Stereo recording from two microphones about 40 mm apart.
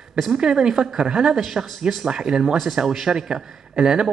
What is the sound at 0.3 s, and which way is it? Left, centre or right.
Speech, centre.